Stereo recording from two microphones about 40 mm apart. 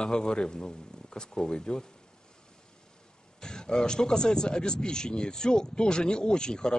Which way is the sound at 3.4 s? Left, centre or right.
Centre.